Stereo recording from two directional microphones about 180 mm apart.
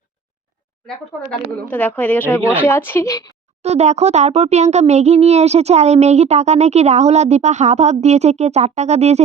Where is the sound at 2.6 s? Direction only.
10° left (ahead or behind).